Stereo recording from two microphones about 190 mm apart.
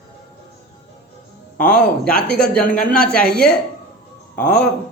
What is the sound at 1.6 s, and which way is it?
A man's voice, 10° left (ahead or behind).